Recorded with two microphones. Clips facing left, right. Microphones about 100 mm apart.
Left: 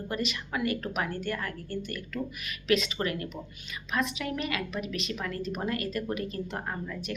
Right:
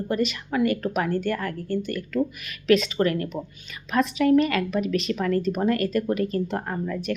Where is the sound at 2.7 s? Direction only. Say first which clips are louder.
Right 7 dB; 40° right (ahead or behind).